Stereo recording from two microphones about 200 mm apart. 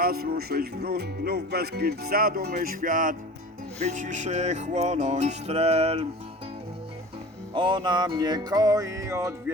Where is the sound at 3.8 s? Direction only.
40° right (ahead or behind).